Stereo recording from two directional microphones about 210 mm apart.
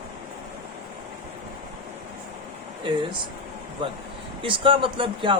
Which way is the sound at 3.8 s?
25° right (ahead or behind).